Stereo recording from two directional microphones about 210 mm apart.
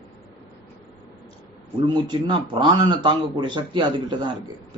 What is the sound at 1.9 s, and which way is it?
A man's voice, 20° right (ahead or behind).